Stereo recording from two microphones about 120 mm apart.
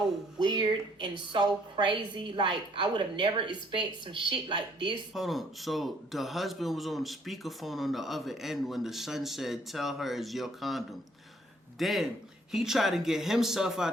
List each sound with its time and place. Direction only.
0.3 s a woman's voice: 40° right (ahead or behind)
5.1 s a man's voice: centre (ahead or behind)